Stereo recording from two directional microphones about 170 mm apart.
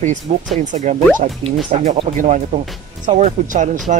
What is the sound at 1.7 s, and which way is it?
Speech, 35° right (ahead or behind).